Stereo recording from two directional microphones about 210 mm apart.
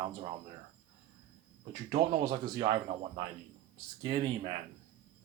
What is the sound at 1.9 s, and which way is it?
A man's voice, 30° right (ahead or behind).